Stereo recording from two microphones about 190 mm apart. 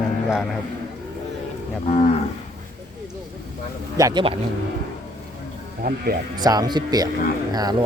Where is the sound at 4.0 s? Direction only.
20° right (ahead or behind).